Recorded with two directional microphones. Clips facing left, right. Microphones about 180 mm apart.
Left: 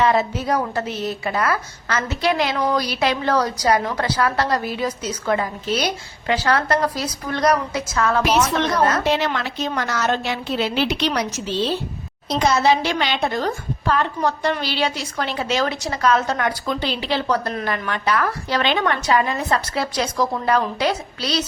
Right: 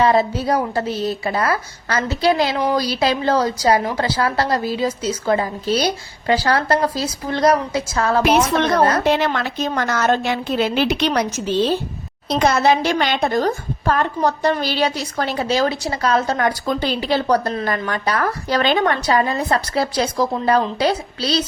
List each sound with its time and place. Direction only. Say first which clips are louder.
0.0 s a woman's voice: right 3 dB; 35° right (ahead or behind)
9.0 s a woman's voice: right 3 dB; 50° right (ahead or behind); by 21.4 s 30° right (ahead or behind)